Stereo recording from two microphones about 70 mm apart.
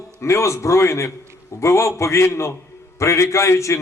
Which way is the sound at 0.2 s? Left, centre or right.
Left.